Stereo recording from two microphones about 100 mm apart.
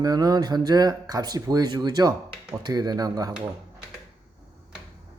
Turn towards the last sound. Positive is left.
turn(degrees=-40)  # may be behind; listen again after turning